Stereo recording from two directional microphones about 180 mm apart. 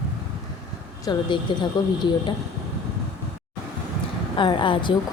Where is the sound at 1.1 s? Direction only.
25° left (ahead or behind).